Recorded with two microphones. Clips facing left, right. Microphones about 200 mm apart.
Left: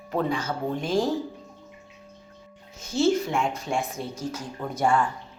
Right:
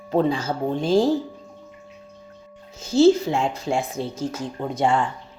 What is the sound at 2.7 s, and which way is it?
Speech, 30° right (ahead or behind).